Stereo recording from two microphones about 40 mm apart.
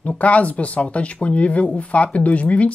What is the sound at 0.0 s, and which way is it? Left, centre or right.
Speech, left.